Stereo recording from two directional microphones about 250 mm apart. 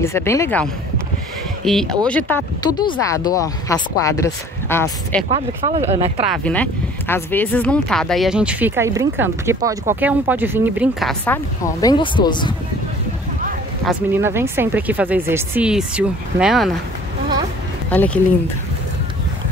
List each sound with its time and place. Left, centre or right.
0.0 s speech: centre
5.7 s speech: right
6.2 s speech: centre
13.8 s speech: centre
17.8 s speech: centre